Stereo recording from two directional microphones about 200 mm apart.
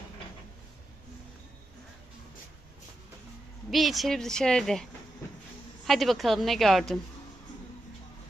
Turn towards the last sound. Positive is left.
turn(degrees=0)  # may be behind; listen again after turning